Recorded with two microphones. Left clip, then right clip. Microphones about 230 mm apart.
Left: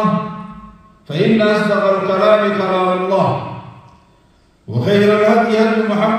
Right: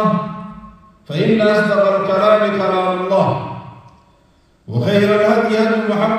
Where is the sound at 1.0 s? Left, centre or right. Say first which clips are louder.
Even; right.